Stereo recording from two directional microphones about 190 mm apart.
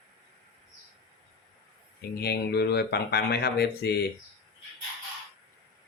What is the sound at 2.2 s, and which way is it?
Speech, 60° left (ahead or behind).